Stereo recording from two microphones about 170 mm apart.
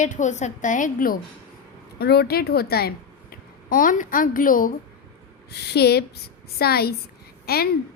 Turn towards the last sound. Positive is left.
turn(degrees=65)  # may be behind; listen again after turning